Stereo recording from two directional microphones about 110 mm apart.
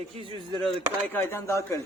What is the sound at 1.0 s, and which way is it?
Speech, 20° left (ahead or behind).